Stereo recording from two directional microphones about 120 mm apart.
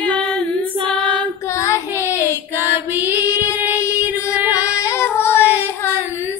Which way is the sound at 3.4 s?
25° left (ahead or behind).